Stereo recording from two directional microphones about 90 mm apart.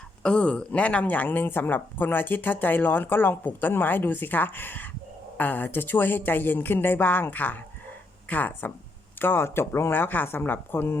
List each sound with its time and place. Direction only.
0.2 s speech: 10° left (ahead or behind)